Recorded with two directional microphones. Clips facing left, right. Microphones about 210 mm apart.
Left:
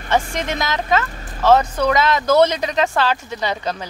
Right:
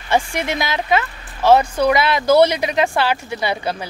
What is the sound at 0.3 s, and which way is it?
Speech, 10° right (ahead or behind).